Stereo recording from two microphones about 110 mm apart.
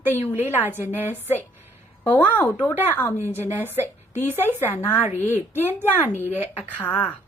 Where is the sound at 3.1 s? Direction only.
20° right (ahead or behind).